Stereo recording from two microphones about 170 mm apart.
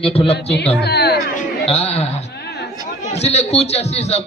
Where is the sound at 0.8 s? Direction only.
75° left (ahead or behind).